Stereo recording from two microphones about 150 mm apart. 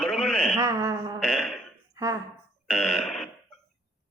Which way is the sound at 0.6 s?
20° right (ahead or behind).